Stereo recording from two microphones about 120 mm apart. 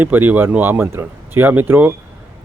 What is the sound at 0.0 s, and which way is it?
Speech, 15° right (ahead or behind).